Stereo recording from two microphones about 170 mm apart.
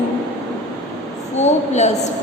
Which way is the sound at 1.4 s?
40° left (ahead or behind).